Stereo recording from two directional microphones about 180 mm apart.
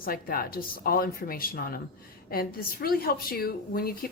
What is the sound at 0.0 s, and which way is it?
A woman's voice, 55° left (ahead or behind).